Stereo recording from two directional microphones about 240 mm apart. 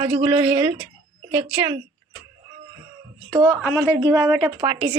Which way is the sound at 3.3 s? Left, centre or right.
Centre.